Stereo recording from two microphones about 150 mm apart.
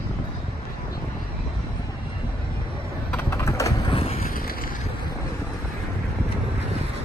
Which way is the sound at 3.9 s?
40° left (ahead or behind).